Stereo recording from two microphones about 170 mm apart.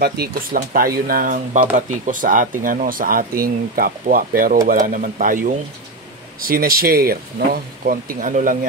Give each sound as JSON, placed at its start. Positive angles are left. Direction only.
{"t": 0.0, "sound": "speech", "side_deg": -65}